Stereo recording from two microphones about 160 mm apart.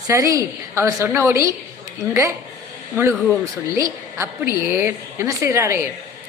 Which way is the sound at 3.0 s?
20° right (ahead or behind).